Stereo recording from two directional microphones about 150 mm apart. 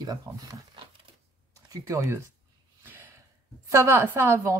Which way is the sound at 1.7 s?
20° right (ahead or behind).